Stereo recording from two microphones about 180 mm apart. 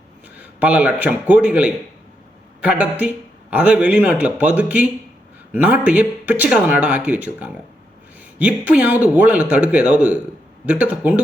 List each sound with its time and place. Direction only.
0.3 s a man's voice: 10° right (ahead or behind)